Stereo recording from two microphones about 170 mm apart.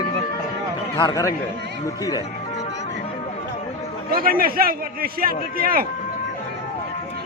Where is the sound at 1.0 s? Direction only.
20° left (ahead or behind).